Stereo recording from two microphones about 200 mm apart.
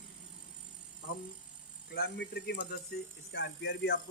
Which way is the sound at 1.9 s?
55° left (ahead or behind).